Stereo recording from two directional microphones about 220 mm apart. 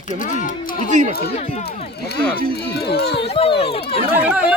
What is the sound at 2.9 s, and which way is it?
Speech, 50° left (ahead or behind).